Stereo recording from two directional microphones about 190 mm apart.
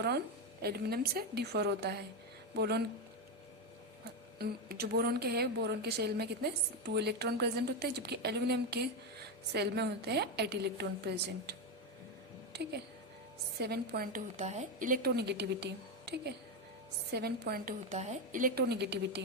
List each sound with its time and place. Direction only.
0.6 s a woman's voice: 55° right (ahead or behind)
4.4 s a woman's voice: 55° right (ahead or behind)
12.5 s a woman's voice: 60° right (ahead or behind)
14.3 s a woman's voice: 35° right (ahead or behind); by 17.7 s 55° right (ahead or behind)
17.8 s a woman's voice: 35° right (ahead or behind); by 19.2 s 60° right (ahead or behind)